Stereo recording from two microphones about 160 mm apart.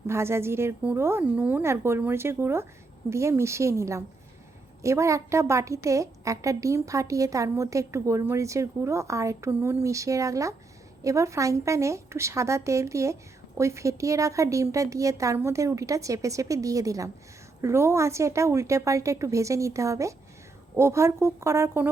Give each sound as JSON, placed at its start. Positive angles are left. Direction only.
{"t": 0.1, "sound": "a woman's voice", "side_deg": -15}